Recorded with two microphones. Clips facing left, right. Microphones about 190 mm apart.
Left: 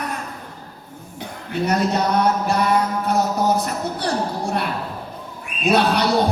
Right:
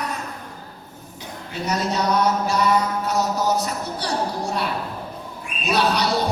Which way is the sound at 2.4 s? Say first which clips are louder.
Left 1 dB; 55° left (ahead or behind).